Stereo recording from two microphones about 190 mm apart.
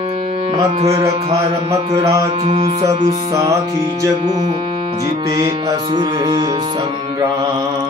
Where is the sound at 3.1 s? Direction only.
15° right (ahead or behind).